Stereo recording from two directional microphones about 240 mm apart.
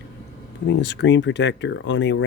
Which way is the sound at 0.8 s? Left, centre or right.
Left.